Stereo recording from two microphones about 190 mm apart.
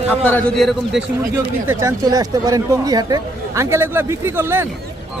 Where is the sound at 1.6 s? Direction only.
20° right (ahead or behind).